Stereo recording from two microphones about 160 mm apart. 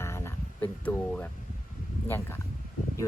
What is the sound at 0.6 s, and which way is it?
Speech, 10° left (ahead or behind).